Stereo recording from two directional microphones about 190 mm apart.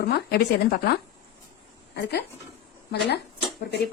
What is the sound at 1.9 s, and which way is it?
Speech, 60° left (ahead or behind).